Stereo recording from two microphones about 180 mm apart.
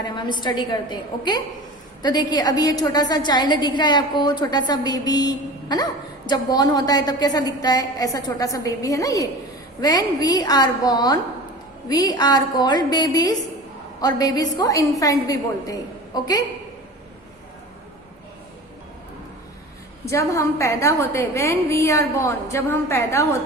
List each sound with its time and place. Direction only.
0.2 s a woman's voice: 25° left (ahead or behind)
20.1 s a woman's voice: 15° left (ahead or behind)